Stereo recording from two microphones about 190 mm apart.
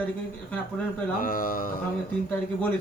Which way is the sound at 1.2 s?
50° left (ahead or behind).